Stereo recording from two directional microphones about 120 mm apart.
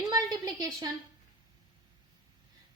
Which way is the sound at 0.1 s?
35° right (ahead or behind).